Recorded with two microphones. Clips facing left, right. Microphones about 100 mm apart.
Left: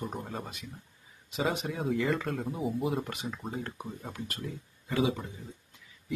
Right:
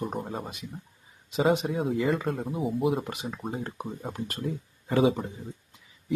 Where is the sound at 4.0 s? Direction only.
30° right (ahead or behind).